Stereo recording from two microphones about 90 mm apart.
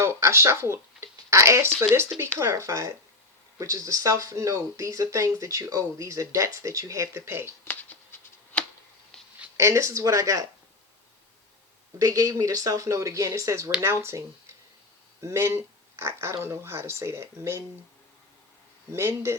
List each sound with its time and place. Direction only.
0.0 s speech: 30° right (ahead or behind)
8.5 s a sound: 10° left (ahead or behind)
9.6 s speech: 35° right (ahead or behind)
11.9 s speech: 40° right (ahead or behind)
15.2 s speech: 30° right (ahead or behind)
18.9 s speech: 30° right (ahead or behind)